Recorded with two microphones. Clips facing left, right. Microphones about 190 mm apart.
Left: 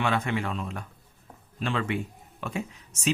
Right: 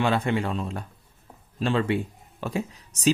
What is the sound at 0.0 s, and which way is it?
Speech, 35° right (ahead or behind).